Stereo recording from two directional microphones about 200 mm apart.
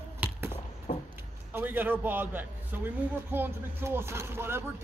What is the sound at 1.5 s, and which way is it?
A man's voice, 10° right (ahead or behind).